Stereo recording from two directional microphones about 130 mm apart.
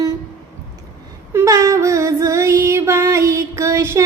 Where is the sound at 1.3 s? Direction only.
25° right (ahead or behind).